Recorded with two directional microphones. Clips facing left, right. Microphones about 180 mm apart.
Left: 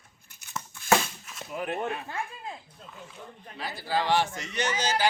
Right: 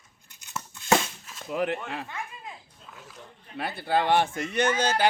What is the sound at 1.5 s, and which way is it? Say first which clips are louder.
Speech: right 5 dB; 80° right.